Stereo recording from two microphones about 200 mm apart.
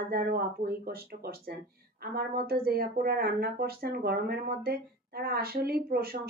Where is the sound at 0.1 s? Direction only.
50° right (ahead or behind).